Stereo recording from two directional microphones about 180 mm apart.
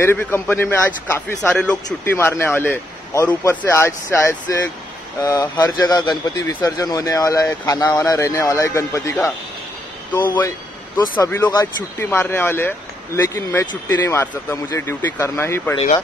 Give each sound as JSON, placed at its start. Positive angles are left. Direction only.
{"t": 0.0, "sound": "speech", "side_deg": 10}
{"t": 11.2, "sound": "speech", "side_deg": 10}